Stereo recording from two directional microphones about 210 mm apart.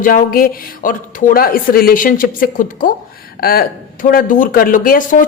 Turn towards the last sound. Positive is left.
turn(degrees=40)  # may be behind; listen again after turning